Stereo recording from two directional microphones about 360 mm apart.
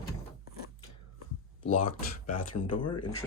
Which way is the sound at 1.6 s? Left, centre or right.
Left.